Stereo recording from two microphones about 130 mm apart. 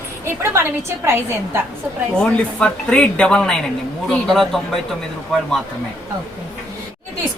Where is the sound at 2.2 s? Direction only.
5° left (ahead or behind).